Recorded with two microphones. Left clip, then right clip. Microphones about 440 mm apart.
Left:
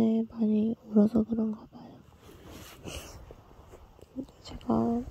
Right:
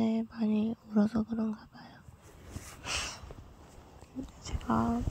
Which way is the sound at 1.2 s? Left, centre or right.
Centre.